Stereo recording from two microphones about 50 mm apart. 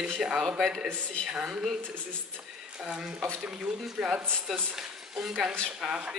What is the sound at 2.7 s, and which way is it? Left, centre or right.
Speech, centre.